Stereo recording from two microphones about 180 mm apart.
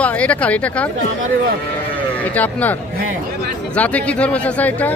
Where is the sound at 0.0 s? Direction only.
5° left (ahead or behind).